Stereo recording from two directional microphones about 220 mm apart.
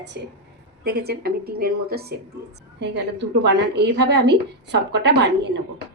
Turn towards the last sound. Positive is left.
turn(degrees=-50)  # may be behind; listen again after turning